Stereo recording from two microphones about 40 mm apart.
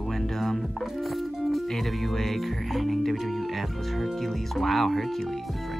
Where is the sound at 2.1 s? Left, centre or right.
Centre.